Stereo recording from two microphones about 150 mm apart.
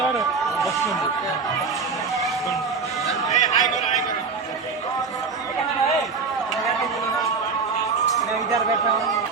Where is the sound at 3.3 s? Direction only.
25° left (ahead or behind).